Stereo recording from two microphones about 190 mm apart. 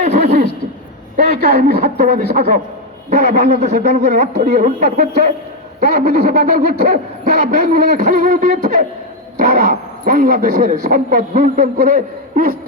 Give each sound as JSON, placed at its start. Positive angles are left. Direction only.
{"t": 0.0, "sound": "speech", "side_deg": -35}
{"t": 1.1, "sound": "a man's voice", "side_deg": -50}
{"t": 3.6, "sound": "speech", "side_deg": -35}
{"t": 4.0, "sound": "a man's voice", "side_deg": -50}